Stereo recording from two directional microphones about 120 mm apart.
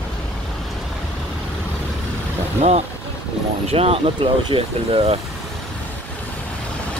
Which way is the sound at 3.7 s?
55° right (ahead or behind).